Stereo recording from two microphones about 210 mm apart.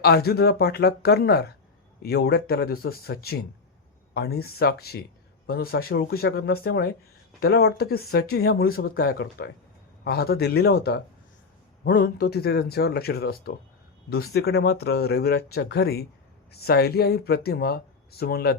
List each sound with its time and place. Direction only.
0.0 s speech: 50° left (ahead or behind)